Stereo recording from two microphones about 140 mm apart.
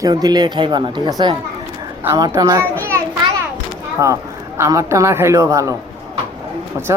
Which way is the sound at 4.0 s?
20° right (ahead or behind).